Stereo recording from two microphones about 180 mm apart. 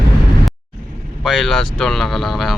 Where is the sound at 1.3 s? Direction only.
Centre (ahead or behind).